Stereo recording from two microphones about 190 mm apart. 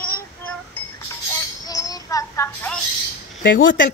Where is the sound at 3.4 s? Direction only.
80° left.